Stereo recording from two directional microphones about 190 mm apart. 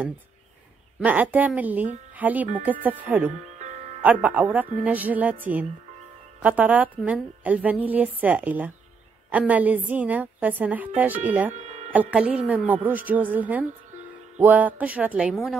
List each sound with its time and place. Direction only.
1.0 s a woman's voice: 10° right (ahead or behind)
3.3 s music: 40° right (ahead or behind)
4.0 s a woman's voice: 10° right (ahead or behind)
11.5 s music: 35° right (ahead or behind)
11.9 s a woman's voice: 5° right (ahead or behind)